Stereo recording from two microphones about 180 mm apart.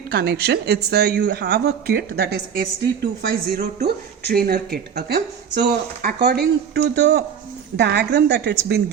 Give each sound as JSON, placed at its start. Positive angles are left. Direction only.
{"t": 0.1, "sound": "a woman's voice", "side_deg": -60}